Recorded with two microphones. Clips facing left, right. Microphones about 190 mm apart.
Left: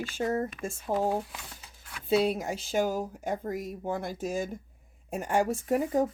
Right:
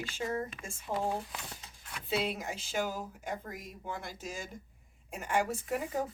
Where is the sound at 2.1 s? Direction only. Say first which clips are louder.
Left 8 dB; 45° left (ahead or behind).